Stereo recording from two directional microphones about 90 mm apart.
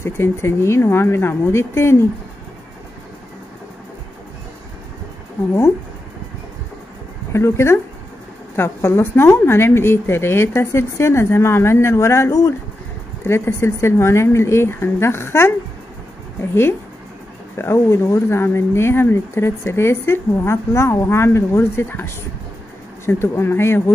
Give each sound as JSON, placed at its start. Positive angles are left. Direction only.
{"t": 0.0, "sound": "speech", "side_deg": 30}
{"t": 7.3, "sound": "speech", "side_deg": 30}